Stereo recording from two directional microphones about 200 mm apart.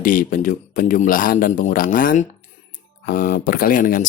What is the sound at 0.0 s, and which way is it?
Speech, 45° left (ahead or behind).